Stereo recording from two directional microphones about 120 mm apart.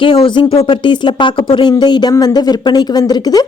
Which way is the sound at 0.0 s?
45° left (ahead or behind).